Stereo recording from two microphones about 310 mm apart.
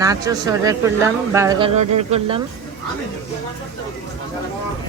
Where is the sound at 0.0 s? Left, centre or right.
Centre.